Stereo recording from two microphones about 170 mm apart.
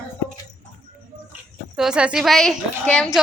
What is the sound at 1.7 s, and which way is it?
A woman's voice, 5° right (ahead or behind).